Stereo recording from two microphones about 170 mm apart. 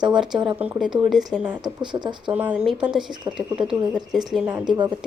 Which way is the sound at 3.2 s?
20° right (ahead or behind).